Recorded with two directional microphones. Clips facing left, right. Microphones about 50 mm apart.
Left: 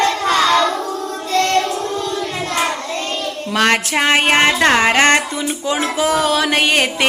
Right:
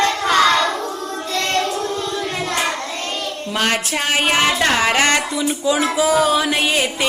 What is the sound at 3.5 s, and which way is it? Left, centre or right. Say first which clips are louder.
Child singing: left 5 dB; left.